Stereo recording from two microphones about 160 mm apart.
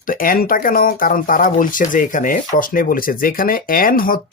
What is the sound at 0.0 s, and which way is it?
Speech, 60° left (ahead or behind).